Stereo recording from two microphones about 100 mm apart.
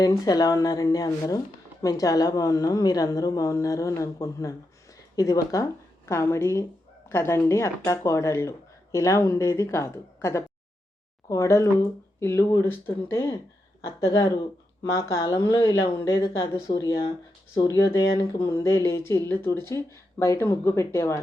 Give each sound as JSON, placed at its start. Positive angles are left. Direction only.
{"t": 0.0, "sound": "a woman's voice", "side_deg": 35}